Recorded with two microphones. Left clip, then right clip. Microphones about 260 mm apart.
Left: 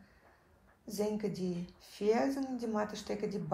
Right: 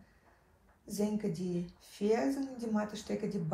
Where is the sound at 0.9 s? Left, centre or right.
Left.